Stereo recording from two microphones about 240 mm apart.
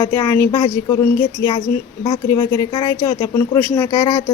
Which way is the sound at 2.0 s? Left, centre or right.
Centre.